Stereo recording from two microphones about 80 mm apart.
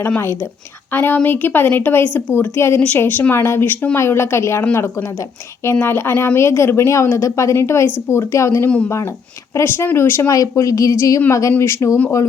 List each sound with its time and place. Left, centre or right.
0.9 s speech: left
5.8 s speech: left
10.3 s speech: left